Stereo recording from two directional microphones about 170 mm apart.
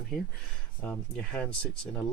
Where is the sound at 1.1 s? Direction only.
5° left (ahead or behind).